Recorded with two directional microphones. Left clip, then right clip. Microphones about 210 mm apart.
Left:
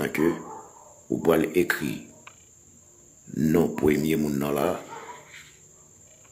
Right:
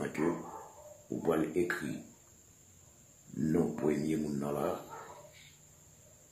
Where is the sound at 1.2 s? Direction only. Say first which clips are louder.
Left 9 dB; 45° left (ahead or behind).